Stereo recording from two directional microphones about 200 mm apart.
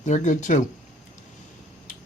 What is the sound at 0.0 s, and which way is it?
Speech, 35° left (ahead or behind).